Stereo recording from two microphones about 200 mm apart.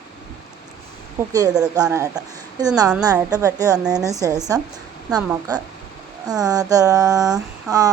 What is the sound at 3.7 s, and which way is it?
Speech, 5° right (ahead or behind).